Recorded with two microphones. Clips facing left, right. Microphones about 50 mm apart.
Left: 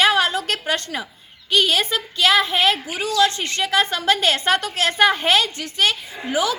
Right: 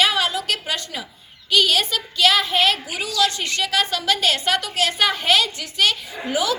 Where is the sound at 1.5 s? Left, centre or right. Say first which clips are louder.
Even; left.